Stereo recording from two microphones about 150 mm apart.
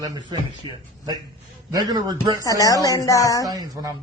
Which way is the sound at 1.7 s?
25° right (ahead or behind).